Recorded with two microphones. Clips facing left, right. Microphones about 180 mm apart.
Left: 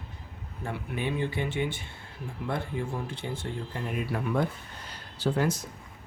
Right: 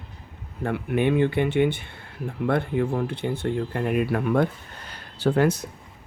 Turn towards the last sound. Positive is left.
turn(degrees=-60)  # may be behind; listen again after turning